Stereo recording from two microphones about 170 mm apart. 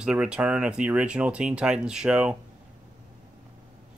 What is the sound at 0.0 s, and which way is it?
Speech, 5° right (ahead or behind).